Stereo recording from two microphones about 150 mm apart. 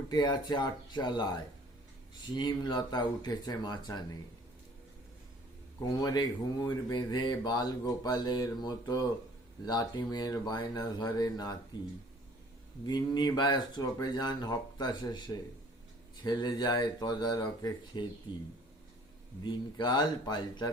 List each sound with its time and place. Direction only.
0.1 s speech: 30° left (ahead or behind)
2.3 s speech: 30° left (ahead or behind)
5.8 s speech: 25° left (ahead or behind)
12.8 s speech: 30° left (ahead or behind)
19.5 s speech: 30° left (ahead or behind)